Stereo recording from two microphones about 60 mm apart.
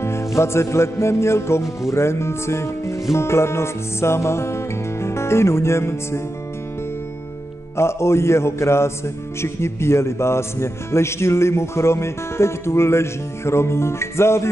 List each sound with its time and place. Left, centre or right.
0.0 s music: left
7.7 s music: left